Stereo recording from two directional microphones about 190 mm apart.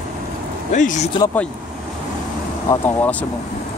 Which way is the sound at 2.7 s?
10° left (ahead or behind).